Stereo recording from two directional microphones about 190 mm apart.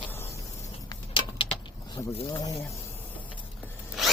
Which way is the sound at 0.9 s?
25° left (ahead or behind).